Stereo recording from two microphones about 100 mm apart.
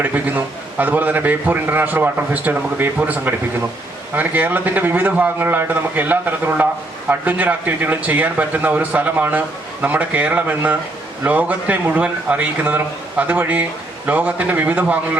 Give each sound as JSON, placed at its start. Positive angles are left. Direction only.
{"t": 0.0, "sound": "a man's voice", "side_deg": -15}